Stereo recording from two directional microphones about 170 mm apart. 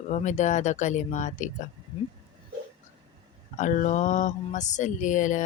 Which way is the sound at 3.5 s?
45° left (ahead or behind).